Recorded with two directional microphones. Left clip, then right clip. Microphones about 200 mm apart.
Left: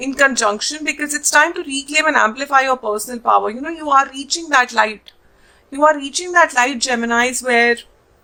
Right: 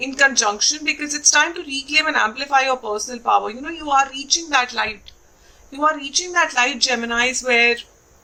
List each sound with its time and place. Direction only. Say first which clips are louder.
0.0 s speech: left 2 dB; 45° left (ahead or behind)